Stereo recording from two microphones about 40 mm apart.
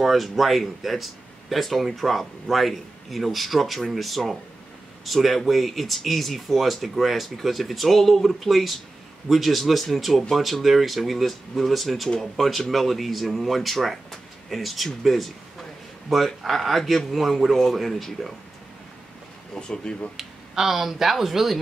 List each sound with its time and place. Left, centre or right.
0.0 s speech: centre
16.1 s speech: centre
19.7 s speech: left
20.2 s speech: centre